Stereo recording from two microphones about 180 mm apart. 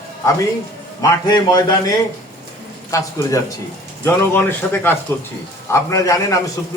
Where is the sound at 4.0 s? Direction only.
10° left (ahead or behind).